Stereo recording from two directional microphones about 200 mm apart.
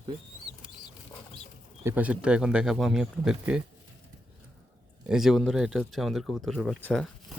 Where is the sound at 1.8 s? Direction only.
10° right (ahead or behind).